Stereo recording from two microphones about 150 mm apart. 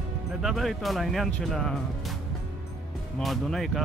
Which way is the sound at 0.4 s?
Centre (ahead or behind).